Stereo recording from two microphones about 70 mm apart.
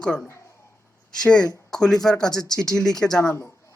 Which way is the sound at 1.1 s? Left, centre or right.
Centre.